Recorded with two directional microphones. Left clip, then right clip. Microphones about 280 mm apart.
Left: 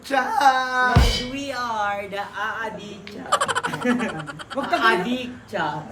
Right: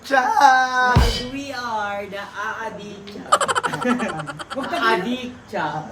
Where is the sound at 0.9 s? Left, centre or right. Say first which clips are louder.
Right 2 dB; centre.